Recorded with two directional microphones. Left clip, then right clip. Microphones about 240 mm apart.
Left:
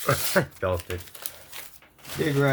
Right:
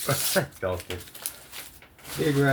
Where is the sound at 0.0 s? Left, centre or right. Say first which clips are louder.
Left 2 dB; left.